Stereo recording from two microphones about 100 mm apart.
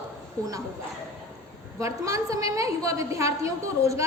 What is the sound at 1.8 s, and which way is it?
A woman's voice, 30° right (ahead or behind).